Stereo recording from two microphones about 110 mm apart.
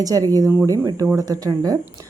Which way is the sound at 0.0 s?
35° right (ahead or behind).